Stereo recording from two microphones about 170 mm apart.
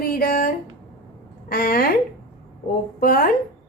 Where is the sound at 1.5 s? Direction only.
60° left (ahead or behind).